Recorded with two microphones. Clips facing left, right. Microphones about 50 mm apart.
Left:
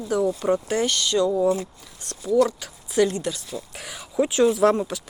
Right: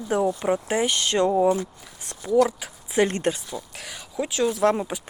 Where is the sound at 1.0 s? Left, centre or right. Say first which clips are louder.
Right 1 dB; right.